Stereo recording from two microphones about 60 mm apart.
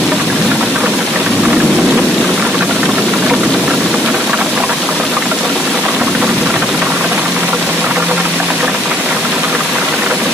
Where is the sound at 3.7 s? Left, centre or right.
Centre.